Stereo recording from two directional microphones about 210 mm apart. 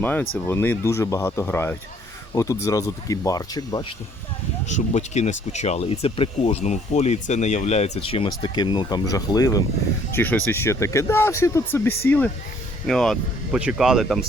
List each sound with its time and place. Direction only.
0.0 s speech: 10° left (ahead or behind)
4.7 s speech: 35° left (ahead or behind); by 14.3 s centre (ahead or behind)